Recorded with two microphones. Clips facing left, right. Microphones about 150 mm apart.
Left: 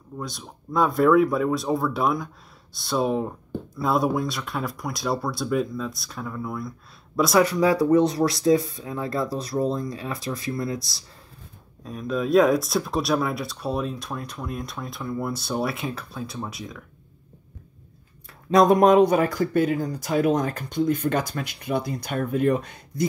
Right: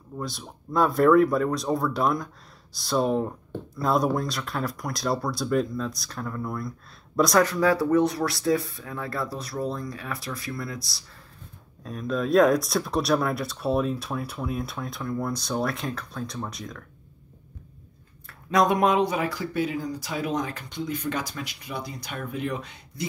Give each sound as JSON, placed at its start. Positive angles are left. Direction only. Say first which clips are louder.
{"t": 0.2, "sound": "speech", "louder": "right 1 dB", "side_deg": 0}
{"t": 11.8, "sound": "speech", "louder": "left 1 dB", "side_deg": 0}
{"t": 18.5, "sound": "speech", "louder": "left 5 dB", "side_deg": 35}